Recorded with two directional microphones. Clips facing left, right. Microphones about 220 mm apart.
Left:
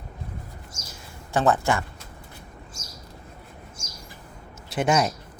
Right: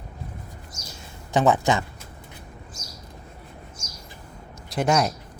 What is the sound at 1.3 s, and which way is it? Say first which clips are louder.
Speech: right 2 dB; 15° right (ahead or behind).